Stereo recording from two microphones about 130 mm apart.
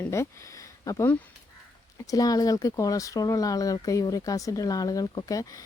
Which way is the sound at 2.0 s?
30° left (ahead or behind).